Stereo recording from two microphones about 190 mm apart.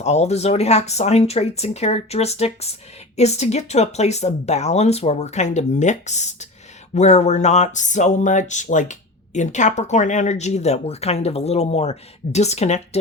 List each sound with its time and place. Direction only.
0.0 s speech: 35° left (ahead or behind)